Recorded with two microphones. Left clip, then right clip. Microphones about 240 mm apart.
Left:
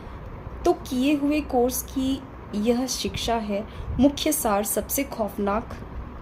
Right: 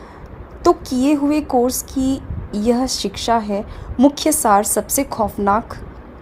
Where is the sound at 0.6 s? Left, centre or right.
Right.